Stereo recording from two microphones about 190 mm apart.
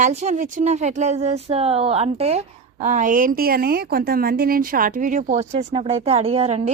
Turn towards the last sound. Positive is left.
turn(degrees=-35)  # may be behind; listen again after turning